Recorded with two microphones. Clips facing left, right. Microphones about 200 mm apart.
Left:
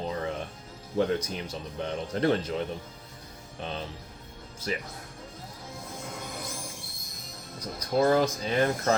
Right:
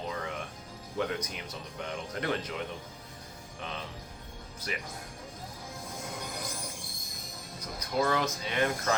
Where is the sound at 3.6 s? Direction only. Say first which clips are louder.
Left 5 dB; 30° left (ahead or behind).